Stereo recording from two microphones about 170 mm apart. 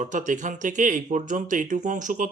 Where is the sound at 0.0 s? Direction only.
50° right (ahead or behind).